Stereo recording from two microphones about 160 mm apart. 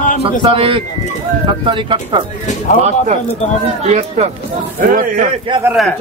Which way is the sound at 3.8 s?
40° right (ahead or behind).